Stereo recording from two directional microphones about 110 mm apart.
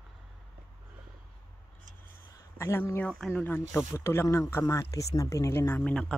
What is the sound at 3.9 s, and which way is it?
Speech, 20° left (ahead or behind).